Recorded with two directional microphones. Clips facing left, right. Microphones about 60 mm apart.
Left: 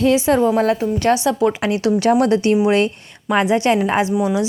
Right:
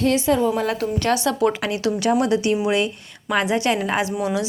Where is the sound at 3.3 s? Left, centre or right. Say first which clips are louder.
Left 4 dB; left.